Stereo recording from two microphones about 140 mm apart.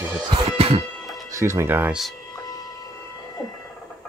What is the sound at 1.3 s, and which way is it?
Speech, 20° right (ahead or behind).